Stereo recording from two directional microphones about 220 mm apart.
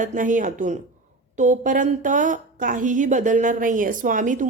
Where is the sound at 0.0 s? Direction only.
35° right (ahead or behind).